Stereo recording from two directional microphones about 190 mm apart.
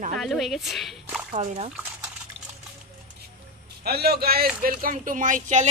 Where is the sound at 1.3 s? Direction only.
40° right (ahead or behind).